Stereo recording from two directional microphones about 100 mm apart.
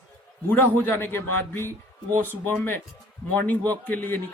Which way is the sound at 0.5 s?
20° left (ahead or behind).